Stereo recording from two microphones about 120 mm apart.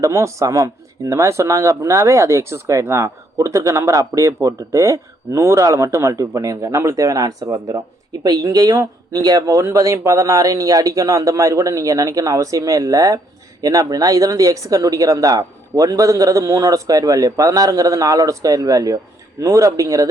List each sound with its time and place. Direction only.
0.0 s speech: 25° right (ahead or behind)